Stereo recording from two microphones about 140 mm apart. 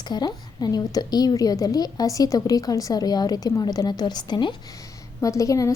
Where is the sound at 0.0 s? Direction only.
30° left (ahead or behind).